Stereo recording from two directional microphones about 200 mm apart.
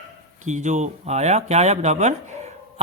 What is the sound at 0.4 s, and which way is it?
Speech, 35° right (ahead or behind).